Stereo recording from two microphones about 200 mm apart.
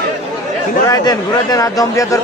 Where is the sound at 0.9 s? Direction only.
20° left (ahead or behind).